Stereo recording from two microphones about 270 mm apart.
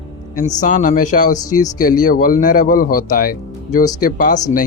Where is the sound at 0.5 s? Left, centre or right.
Left.